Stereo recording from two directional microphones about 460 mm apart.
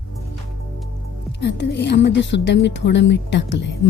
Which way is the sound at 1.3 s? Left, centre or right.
Left.